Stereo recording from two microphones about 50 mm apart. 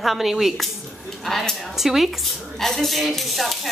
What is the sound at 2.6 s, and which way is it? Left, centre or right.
A woman's voice, centre.